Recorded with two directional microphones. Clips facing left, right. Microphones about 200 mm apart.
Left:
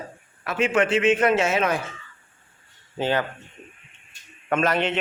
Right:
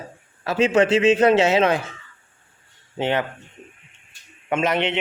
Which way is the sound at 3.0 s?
20° right (ahead or behind).